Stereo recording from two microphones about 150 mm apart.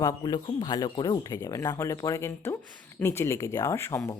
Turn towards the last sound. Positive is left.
turn(degrees=20)  # may be behind; listen again after turning